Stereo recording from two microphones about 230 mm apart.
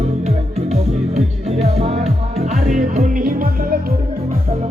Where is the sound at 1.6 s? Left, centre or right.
Right.